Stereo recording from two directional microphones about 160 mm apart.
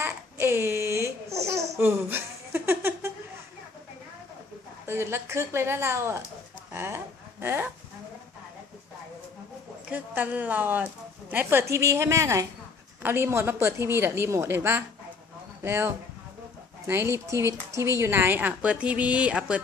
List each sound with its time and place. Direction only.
0.0 s babbling: 15° right (ahead or behind)
4.9 s speech: 15° right (ahead or behind)
9.9 s a woman's voice: 10° right (ahead or behind)